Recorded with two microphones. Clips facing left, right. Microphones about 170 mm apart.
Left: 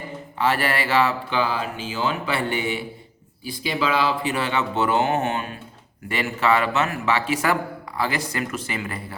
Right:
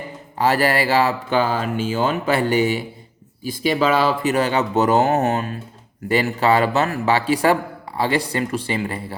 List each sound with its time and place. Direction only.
0.3 s speech: 40° right (ahead or behind)